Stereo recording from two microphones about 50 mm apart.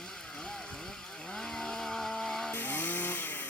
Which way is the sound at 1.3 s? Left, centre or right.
Centre.